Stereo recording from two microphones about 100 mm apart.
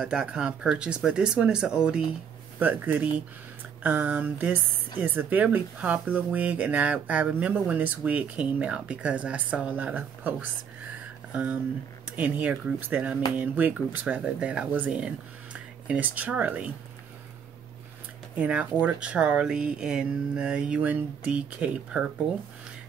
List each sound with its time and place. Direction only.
0.0 s a woman's voice: 10° right (ahead or behind)
18.4 s a woman's voice: 15° right (ahead or behind)